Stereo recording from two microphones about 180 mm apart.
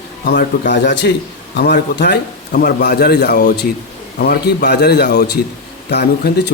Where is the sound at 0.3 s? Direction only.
50° left (ahead or behind).